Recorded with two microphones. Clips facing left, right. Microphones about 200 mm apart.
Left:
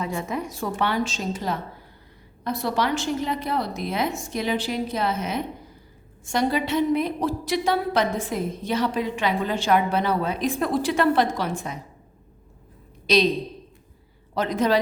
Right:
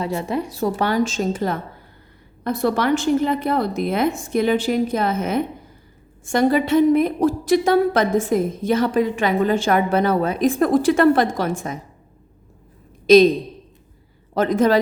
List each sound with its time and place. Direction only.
0.0 s a woman's voice: 35° right (ahead or behind)
13.1 s a man's voice: 50° right (ahead or behind)
14.3 s a woman's voice: 50° right (ahead or behind)